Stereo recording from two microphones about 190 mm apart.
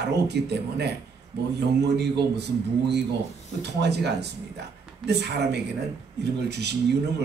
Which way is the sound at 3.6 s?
60° right (ahead or behind).